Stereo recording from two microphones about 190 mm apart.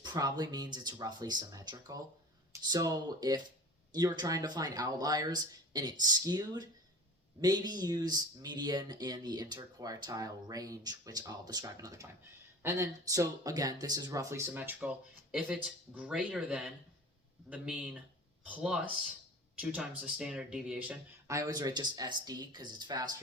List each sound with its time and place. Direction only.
0.0 s speech: 20° right (ahead or behind)